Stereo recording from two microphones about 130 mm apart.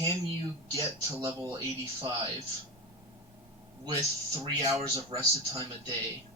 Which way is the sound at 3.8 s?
25° right (ahead or behind).